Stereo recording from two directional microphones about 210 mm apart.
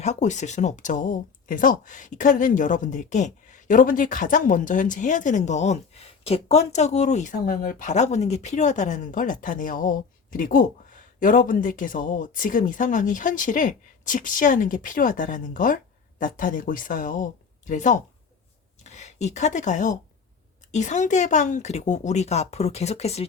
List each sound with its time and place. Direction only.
0.0 s speech: 35° left (ahead or behind)